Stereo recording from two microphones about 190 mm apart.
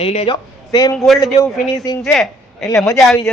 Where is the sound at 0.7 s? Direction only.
20° left (ahead or behind).